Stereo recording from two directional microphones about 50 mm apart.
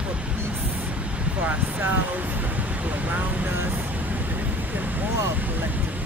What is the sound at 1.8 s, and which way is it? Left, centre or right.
Vehicle, right.